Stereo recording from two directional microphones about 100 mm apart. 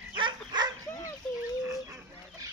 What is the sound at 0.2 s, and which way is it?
Dog, 45° right (ahead or behind).